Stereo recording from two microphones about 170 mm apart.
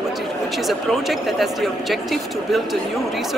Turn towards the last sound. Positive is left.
turn(degrees=0)  # may be behind; listen again after turning